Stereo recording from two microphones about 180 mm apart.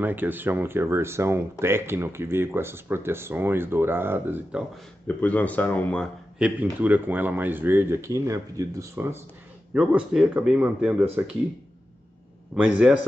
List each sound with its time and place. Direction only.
0.0 s speech: 10° right (ahead or behind)
5.0 s speech: 10° left (ahead or behind)
6.3 s speech: 5° right (ahead or behind)
12.5 s a man's voice: 5° right (ahead or behind)